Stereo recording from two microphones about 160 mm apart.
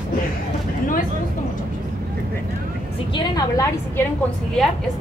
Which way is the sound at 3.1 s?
25° left (ahead or behind).